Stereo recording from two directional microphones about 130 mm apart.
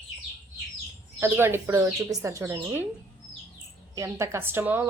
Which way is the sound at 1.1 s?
15° right (ahead or behind).